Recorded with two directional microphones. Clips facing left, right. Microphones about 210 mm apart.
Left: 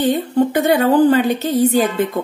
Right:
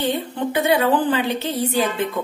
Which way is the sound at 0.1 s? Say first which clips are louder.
Left 7 dB; 45° left (ahead or behind).